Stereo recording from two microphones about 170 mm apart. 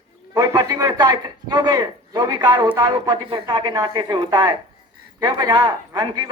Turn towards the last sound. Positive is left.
turn(degrees=-25)  # may be behind; listen again after turning